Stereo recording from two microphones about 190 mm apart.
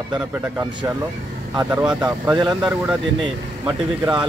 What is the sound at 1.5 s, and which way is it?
Speech, 15° right (ahead or behind).